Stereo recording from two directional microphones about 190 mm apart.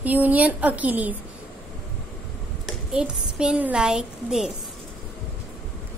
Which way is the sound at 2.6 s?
5° right (ahead or behind).